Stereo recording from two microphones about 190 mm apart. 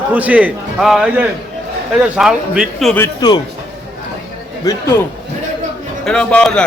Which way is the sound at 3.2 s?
20° left (ahead or behind).